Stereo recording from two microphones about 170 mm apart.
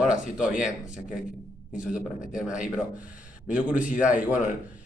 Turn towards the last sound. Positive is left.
turn(degrees=-5)  # may be behind; listen again after turning